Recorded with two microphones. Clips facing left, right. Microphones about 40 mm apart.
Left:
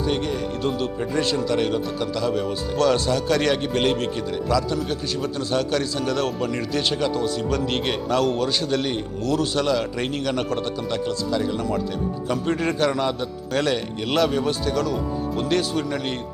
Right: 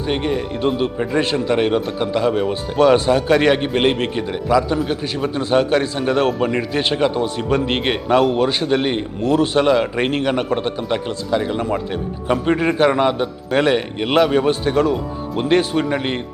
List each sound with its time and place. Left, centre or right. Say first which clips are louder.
0.1 s a man's voice: right 4 dB; right